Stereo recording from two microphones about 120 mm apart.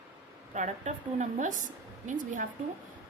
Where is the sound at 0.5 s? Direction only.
80° right.